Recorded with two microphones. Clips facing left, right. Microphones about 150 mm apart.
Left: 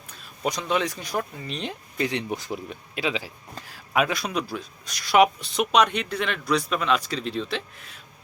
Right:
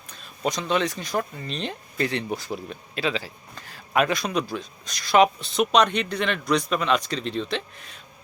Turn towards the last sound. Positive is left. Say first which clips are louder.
# right 2 dB
turn(degrees=5)  # may be behind; listen again after turning